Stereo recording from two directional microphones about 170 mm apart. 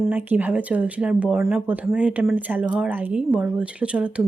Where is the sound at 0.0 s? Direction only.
10° right (ahead or behind).